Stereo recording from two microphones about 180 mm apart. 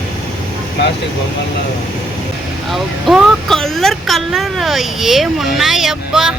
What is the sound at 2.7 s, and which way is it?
Speech, centre (ahead or behind).